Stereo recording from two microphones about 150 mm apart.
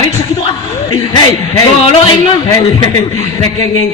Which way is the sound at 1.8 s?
35° left (ahead or behind).